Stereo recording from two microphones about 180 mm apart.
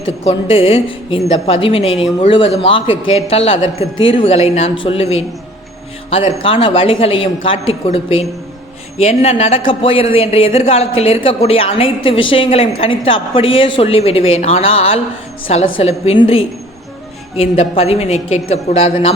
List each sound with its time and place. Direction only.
0.3 s a woman's voice: 30° left (ahead or behind)
6.4 s a woman's voice: 30° left (ahead or behind)